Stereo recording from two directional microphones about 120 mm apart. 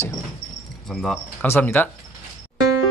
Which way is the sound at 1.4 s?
20° left (ahead or behind).